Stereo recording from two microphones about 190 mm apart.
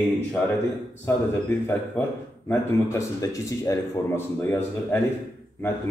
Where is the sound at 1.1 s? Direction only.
10° left (ahead or behind).